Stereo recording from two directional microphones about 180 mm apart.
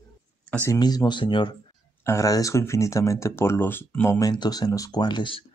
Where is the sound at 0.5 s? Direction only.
10° left (ahead or behind).